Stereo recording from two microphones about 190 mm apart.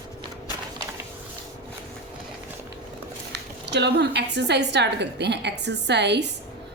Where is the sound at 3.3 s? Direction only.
65° right (ahead or behind).